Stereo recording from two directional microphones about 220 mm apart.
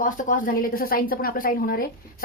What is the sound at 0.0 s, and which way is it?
Speech, 40° left (ahead or behind).